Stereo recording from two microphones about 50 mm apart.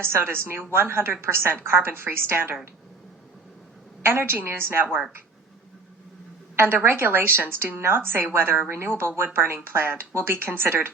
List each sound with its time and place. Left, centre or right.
0.0 s a woman's voice: right
4.0 s a woman's voice: right
6.8 s a woman's voice: right